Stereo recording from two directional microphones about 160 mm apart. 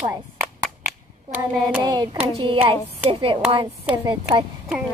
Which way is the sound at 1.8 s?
25° right (ahead or behind).